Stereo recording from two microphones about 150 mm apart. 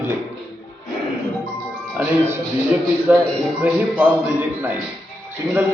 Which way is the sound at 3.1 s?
10° right (ahead or behind).